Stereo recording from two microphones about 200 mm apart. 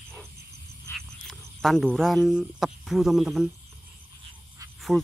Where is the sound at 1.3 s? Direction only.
Centre (ahead or behind).